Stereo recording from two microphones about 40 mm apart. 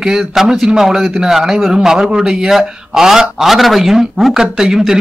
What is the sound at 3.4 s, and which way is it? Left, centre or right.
A man's voice, centre.